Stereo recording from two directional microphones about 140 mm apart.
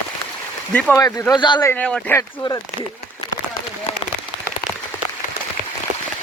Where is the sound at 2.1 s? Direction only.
25° left (ahead or behind).